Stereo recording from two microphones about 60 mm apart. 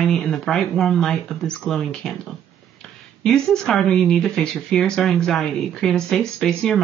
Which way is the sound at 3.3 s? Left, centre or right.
Centre.